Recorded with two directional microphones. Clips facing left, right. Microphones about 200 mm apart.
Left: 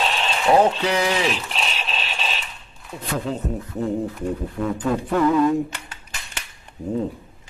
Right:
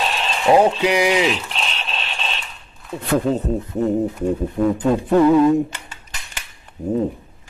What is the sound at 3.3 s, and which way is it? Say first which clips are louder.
Speech: right 5 dB; 25° right (ahead or behind).